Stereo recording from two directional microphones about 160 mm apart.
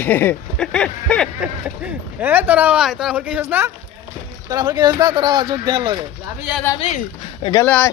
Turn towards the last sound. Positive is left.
turn(degrees=10)  # may be behind; listen again after turning